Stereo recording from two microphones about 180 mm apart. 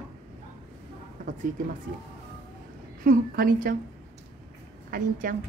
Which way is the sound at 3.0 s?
50° right (ahead or behind).